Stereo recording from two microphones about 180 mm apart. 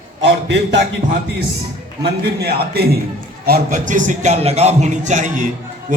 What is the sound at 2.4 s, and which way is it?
A man's voice, 60° right (ahead or behind).